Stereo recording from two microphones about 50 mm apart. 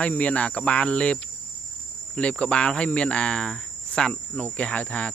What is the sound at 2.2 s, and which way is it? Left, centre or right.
Speech, left.